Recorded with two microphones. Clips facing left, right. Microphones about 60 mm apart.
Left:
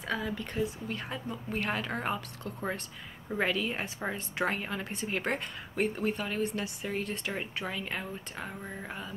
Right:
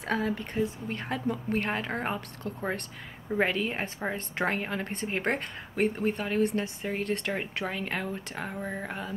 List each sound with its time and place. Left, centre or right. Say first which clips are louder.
0.0 s speech: right 4 dB; right
0.3 s a woman's voice: right 3 dB; right
1.0 s a woman's voice: right 7 dB; right
1.7 s a woman's voice: right 2 dB; right
7.1 s a woman's voice: right 5 dB; right